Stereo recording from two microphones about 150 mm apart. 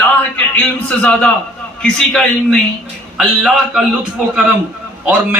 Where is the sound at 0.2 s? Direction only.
10° left (ahead or behind).